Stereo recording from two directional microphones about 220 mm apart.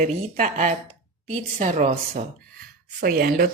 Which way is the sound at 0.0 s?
35° right (ahead or behind).